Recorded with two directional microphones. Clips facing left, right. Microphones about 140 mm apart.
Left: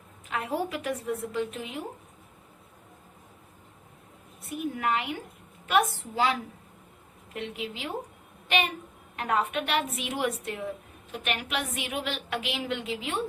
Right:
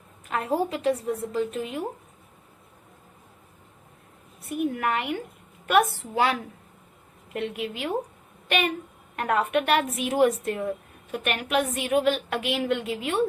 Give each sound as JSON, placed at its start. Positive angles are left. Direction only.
{"t": 0.3, "sound": "a woman's voice", "side_deg": -40}
{"t": 4.4, "sound": "speech", "side_deg": -55}
{"t": 7.3, "sound": "speech", "side_deg": -55}
{"t": 10.0, "sound": "a woman's voice", "side_deg": -45}